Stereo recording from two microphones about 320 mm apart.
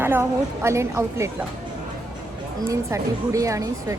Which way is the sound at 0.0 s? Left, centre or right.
Centre.